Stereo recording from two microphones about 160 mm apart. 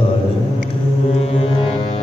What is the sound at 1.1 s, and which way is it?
Music, 40° left (ahead or behind).